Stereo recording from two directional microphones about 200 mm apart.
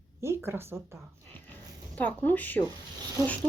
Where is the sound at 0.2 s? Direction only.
10° right (ahead or behind).